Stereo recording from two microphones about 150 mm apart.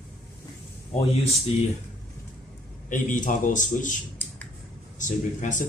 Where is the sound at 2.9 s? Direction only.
60° left (ahead or behind).